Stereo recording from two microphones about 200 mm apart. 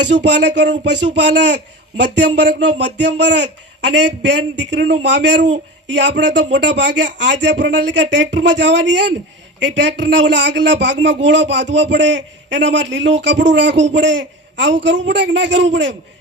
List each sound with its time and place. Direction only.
0.2 s speech: 60° right (ahead or behind)